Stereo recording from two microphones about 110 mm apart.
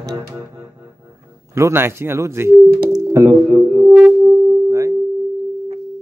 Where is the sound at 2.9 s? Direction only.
25° right (ahead or behind).